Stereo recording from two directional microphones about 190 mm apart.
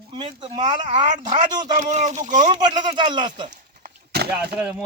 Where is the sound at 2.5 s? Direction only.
25° right (ahead or behind).